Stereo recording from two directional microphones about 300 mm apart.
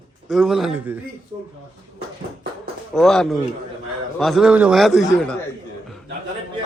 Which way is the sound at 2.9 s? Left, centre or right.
Centre.